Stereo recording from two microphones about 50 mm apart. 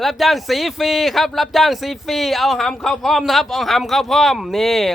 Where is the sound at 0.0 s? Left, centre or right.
Centre.